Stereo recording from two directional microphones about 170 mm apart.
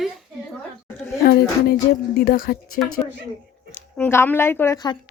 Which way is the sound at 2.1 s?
65° left (ahead or behind).